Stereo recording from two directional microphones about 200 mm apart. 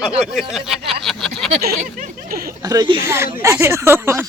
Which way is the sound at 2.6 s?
20° right (ahead or behind).